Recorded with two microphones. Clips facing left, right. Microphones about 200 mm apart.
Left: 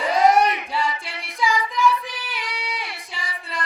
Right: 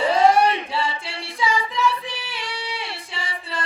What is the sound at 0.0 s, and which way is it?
Singing, 30° right (ahead or behind).